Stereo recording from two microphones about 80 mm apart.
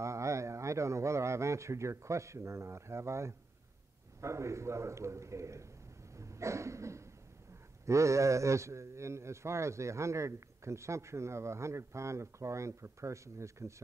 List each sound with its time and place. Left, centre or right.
0.0 s a man's voice: right
6.1 s a sound: right
7.8 s a man's voice: right